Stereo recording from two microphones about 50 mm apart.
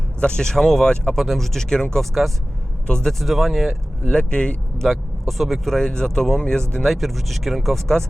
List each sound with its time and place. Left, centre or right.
0.2 s speech: centre
3.1 s speech: centre
4.0 s speech: left
4.9 s speech: centre
6.9 s speech: centre